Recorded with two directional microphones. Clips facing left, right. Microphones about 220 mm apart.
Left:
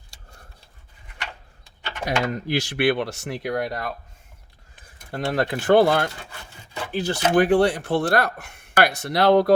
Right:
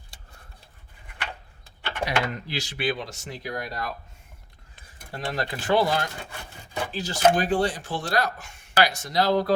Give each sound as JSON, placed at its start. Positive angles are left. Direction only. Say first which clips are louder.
{"t": 2.0, "sound": "speech", "louder": "left 5 dB", "side_deg": 45}
{"t": 2.6, "sound": "speech", "louder": "left 7 dB", "side_deg": 65}
{"t": 5.1, "sound": "speech", "louder": "left 6 dB", "side_deg": 55}